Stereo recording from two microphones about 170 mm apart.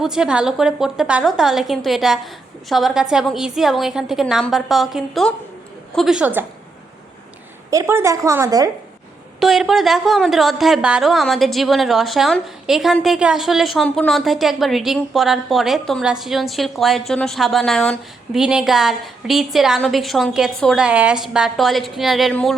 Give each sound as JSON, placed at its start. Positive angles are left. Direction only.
{"t": 0.0, "sound": "a woman's voice", "side_deg": -5}
{"t": 7.7, "sound": "a woman's voice", "side_deg": -15}
{"t": 9.4, "sound": "a woman's voice", "side_deg": 0}